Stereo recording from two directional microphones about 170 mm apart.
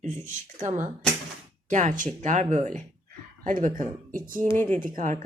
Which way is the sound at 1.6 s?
50° right (ahead or behind).